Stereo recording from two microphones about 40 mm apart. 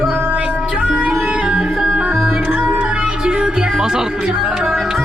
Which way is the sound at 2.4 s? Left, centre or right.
Right.